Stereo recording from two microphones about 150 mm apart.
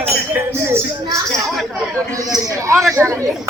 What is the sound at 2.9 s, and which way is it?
Speech, 20° right (ahead or behind).